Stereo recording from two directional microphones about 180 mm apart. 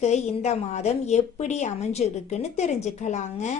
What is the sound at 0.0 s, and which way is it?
A woman's voice, 40° left (ahead or behind).